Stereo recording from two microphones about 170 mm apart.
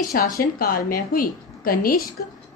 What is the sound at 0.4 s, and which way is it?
A woman's voice, 60° left (ahead or behind).